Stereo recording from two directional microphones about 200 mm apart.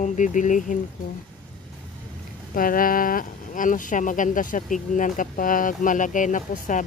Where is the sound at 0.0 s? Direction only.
40° left (ahead or behind).